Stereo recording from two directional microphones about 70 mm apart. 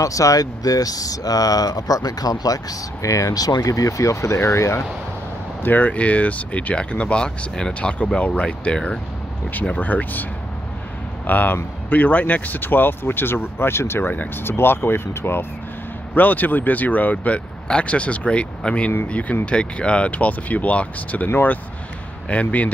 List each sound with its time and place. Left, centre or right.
0.0 s speech: left
5.6 s speech: left
9.5 s speech: left
11.2 s speech: left